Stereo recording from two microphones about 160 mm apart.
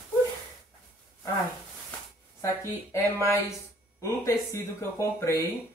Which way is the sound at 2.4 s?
20° left (ahead or behind).